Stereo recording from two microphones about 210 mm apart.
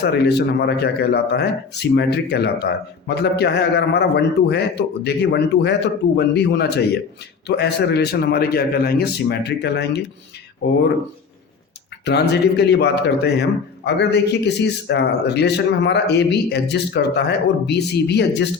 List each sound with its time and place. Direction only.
0.0 s a man's voice: 50° left (ahead or behind)
12.3 s a man's voice: 50° left (ahead or behind)